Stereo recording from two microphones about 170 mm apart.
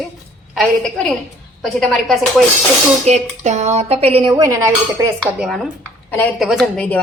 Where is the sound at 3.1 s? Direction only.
40° right (ahead or behind).